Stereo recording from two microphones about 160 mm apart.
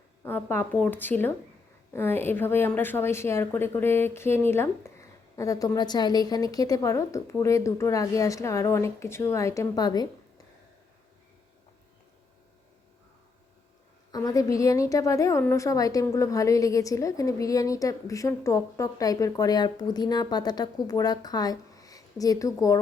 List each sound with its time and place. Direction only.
0.2 s a woman's voice: 10° left (ahead or behind)
14.1 s a woman's voice: 20° left (ahead or behind)